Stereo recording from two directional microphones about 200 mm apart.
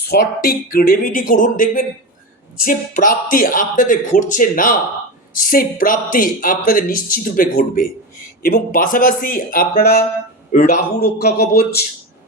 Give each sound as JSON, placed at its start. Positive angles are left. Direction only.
{"t": 0.0, "sound": "speech", "side_deg": 50}
{"t": 10.5, "sound": "a man's voice", "side_deg": 35}
{"t": 11.0, "sound": "speech", "side_deg": 55}